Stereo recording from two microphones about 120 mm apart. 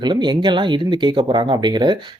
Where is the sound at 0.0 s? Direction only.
40° right (ahead or behind).